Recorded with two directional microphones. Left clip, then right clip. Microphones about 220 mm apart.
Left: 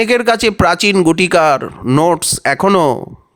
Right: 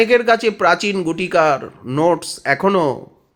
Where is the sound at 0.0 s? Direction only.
50° left (ahead or behind).